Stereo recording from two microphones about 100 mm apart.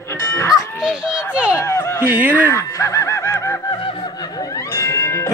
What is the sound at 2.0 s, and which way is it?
Speech, 20° right (ahead or behind).